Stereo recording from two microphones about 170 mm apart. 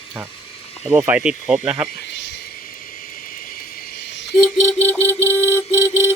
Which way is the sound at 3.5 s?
75° left (ahead or behind).